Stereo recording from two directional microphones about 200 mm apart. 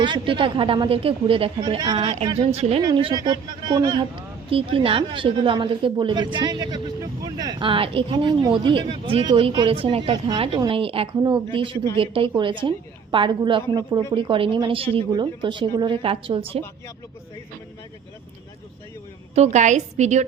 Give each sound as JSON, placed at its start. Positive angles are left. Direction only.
{"t": 0.0, "sound": "speech", "side_deg": -25}
{"t": 19.3, "sound": "a woman's voice", "side_deg": -35}